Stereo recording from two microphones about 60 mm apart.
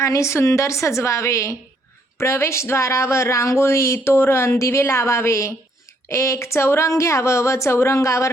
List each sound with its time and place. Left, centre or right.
0.0 s speech: left